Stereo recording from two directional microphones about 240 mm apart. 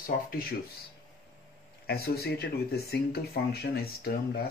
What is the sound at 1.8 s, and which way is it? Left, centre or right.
Speech, left.